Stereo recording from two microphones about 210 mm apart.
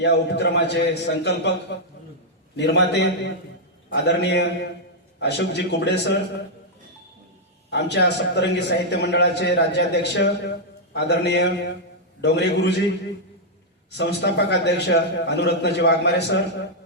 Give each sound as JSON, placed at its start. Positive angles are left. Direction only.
{"t": 0.0, "sound": "a man's voice", "side_deg": 55}
{"t": 7.7, "sound": "a man's voice", "side_deg": 55}
{"t": 13.9, "sound": "a man's voice", "side_deg": 55}